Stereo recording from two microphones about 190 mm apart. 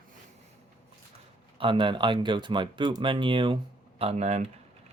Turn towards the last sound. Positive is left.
turn(degrees=-35)  # may be behind; listen again after turning